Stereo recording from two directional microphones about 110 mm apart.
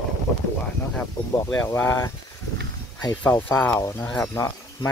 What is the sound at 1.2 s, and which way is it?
Speech, 35° left (ahead or behind).